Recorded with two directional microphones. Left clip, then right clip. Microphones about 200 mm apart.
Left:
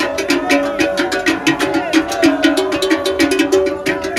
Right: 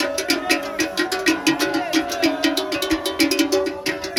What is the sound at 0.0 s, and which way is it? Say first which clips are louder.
Music: left 5 dB; 40° right (ahead or behind).